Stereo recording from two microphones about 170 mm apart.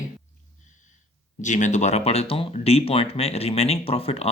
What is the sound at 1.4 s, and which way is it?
Speech, 45° left (ahead or behind).